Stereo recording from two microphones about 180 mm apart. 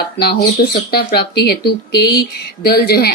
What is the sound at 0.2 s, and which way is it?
Speech, 60° left (ahead or behind).